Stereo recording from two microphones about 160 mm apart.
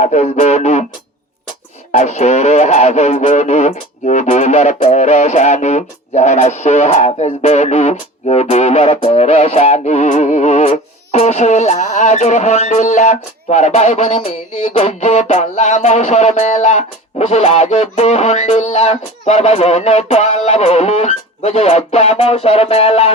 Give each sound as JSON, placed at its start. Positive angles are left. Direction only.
{"t": 0.0, "sound": "speech", "side_deg": 45}
{"t": 1.9, "sound": "speech", "side_deg": 45}